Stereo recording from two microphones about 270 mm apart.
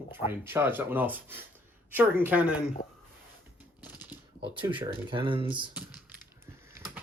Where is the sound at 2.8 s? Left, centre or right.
Left.